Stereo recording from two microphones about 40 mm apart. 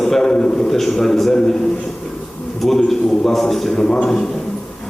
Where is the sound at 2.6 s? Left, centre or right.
Centre.